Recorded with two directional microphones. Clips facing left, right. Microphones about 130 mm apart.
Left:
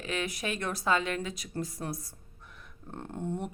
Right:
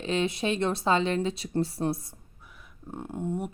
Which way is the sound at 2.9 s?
10° right (ahead or behind).